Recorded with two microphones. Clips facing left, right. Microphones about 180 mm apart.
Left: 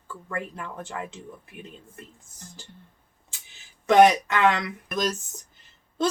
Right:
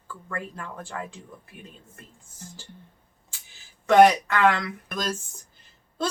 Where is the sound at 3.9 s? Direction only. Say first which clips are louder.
Even; 20° left (ahead or behind).